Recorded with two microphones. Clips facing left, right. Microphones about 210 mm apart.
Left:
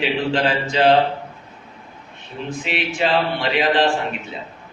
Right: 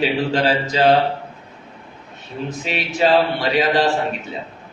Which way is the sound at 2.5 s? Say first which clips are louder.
Left 3 dB; 40° right (ahead or behind).